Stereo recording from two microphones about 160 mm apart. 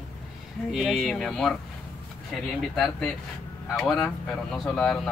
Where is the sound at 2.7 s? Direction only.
Centre (ahead or behind).